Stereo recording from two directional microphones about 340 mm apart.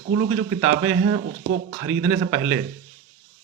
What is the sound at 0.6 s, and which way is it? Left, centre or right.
Speech, right.